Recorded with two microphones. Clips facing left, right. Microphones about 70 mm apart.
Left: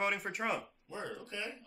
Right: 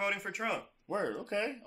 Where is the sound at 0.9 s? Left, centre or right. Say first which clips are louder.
Right 9 dB; right.